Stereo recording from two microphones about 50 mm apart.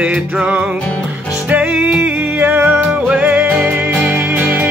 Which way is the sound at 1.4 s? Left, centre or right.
Right.